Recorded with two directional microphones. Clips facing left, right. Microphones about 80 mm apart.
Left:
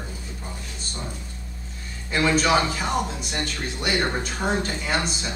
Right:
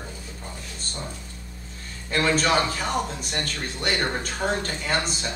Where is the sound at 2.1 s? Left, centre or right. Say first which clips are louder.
Left 2 dB; centre.